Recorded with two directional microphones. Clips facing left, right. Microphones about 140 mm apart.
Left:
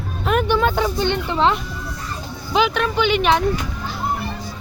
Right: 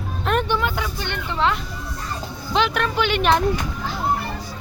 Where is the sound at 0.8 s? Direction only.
25° left (ahead or behind).